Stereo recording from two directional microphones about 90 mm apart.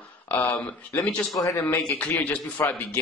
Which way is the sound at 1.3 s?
35° left (ahead or behind).